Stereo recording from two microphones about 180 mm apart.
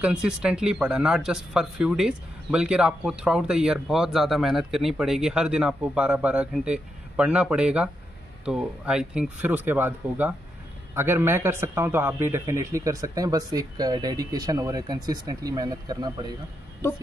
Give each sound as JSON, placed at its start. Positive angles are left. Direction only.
{"t": 0.0, "sound": "a man's voice", "side_deg": -5}